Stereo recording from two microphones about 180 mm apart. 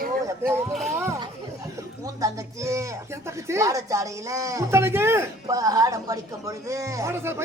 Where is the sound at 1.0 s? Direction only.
15° right (ahead or behind).